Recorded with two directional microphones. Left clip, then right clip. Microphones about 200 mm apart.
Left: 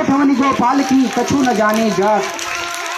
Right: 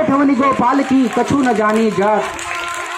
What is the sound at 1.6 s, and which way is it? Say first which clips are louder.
Speech: even; 25° right (ahead or behind).